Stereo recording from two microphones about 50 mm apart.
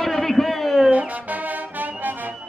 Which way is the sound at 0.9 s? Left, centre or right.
Right.